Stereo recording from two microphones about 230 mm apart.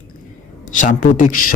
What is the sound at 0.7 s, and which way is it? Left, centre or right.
Speech, left.